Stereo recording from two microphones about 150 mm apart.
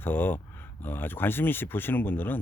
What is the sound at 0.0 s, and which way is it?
Speech, 15° left (ahead or behind).